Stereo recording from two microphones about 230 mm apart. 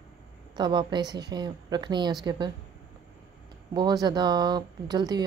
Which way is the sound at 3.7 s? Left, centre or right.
Centre.